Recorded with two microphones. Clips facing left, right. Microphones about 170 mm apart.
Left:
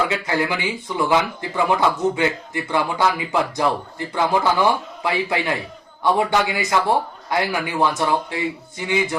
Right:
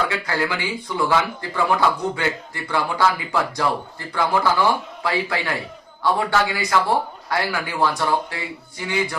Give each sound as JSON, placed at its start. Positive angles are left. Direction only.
{"t": 0.1, "sound": "speech", "side_deg": 20}